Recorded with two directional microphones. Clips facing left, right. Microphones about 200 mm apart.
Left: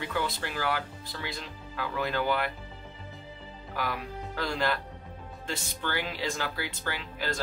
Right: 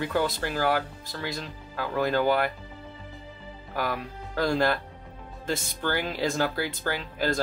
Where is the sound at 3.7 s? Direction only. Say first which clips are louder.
Right 3 dB; 45° right (ahead or behind).